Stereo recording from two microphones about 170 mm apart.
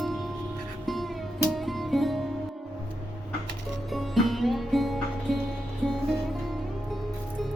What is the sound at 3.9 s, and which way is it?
Music, centre (ahead or behind).